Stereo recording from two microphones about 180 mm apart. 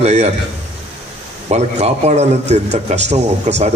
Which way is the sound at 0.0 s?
35° right (ahead or behind).